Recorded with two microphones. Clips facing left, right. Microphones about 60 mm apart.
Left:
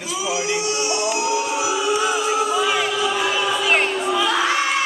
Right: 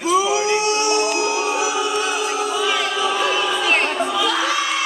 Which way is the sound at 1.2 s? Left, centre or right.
Right.